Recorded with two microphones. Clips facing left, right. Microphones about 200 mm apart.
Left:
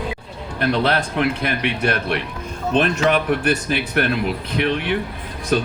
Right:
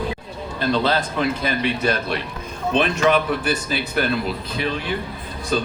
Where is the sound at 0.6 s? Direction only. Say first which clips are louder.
Left 1 dB; 70° left (ahead or behind).